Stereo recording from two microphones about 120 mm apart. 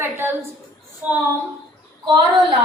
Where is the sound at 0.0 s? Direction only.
20° right (ahead or behind).